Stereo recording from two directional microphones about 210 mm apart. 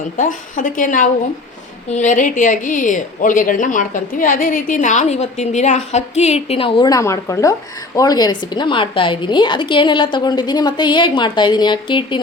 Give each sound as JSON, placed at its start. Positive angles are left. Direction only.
{"t": 0.2, "sound": "a woman's voice", "side_deg": 40}